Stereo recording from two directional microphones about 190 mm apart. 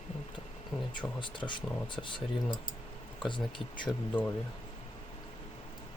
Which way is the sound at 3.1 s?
25° left (ahead or behind).